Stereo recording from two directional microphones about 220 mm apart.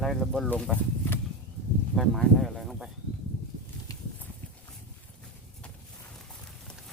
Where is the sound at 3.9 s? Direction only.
15° left (ahead or behind).